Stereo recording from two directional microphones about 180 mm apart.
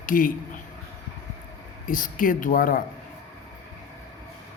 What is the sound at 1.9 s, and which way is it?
Speech, 50° left (ahead or behind).